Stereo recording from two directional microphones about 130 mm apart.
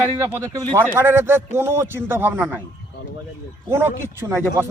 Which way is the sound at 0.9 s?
15° right (ahead or behind).